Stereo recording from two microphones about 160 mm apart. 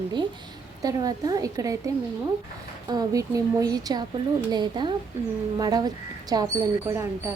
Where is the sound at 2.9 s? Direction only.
20° right (ahead or behind).